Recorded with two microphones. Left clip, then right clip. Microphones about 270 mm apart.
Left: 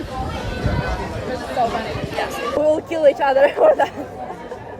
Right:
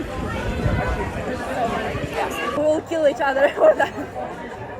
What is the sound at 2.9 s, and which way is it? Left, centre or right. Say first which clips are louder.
A woman's voice: left 4 dB; left.